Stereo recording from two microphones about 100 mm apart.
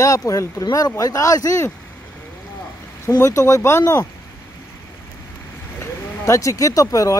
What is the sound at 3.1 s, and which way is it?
Speech, 30° left (ahead or behind).